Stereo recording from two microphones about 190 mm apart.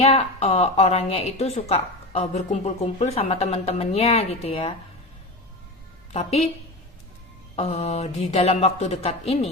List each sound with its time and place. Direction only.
0.0 s speech: 35° left (ahead or behind)
7.5 s speech: 35° left (ahead or behind)